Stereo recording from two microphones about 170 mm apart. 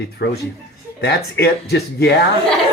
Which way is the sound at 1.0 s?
75° left (ahead or behind).